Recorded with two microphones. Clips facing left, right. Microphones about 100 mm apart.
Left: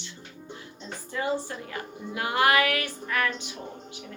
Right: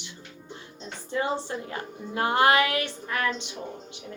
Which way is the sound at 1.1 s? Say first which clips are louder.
Right 1 dB; 25° right (ahead or behind).